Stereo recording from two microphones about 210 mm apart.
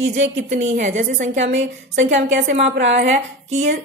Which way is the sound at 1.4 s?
60° right (ahead or behind).